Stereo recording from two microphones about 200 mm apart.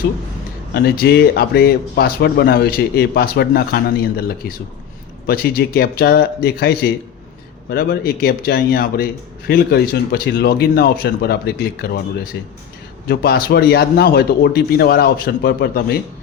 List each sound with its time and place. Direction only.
0.7 s speech: 50° left (ahead or behind)
5.2 s speech: 50° left (ahead or behind)